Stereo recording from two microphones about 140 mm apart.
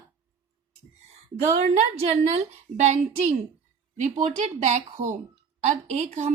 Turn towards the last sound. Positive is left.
turn(degrees=-55)  # may be behind; listen again after turning